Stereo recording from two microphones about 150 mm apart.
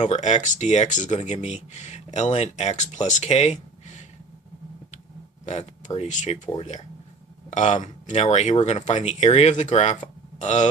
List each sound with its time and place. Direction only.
0.0 s speech: 50° left (ahead or behind)
6.0 s speech: 50° left (ahead or behind)